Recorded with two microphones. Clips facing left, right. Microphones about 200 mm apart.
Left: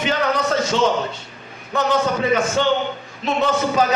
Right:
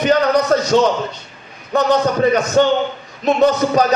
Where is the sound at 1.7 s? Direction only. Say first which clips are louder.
Right 4 dB; 40° right (ahead or behind).